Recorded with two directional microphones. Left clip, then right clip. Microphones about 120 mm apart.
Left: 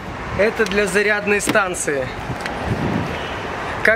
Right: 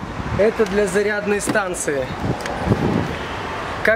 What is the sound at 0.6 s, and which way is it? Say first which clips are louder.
Speech: left 1 dB; 20° left (ahead or behind).